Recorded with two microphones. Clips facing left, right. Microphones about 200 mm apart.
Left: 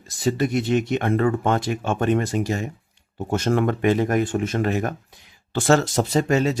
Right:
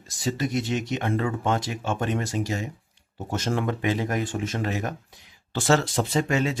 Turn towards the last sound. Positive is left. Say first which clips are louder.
# left 4 dB
turn(degrees=40)  # may be behind; listen again after turning